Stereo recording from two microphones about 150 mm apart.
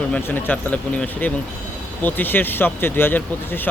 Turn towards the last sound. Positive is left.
turn(degrees=15)  # may be behind; listen again after turning